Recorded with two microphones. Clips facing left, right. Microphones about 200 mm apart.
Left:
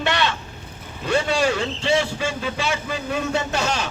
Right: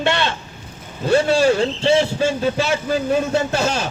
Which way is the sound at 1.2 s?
40° right (ahead or behind).